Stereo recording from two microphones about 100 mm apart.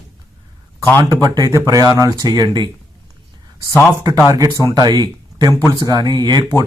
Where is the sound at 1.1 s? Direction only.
40° right (ahead or behind).